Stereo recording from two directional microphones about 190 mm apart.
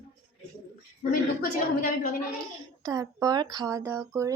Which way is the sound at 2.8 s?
20° right (ahead or behind).